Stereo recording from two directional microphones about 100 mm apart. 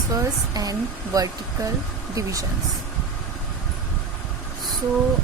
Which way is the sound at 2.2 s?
35° right (ahead or behind).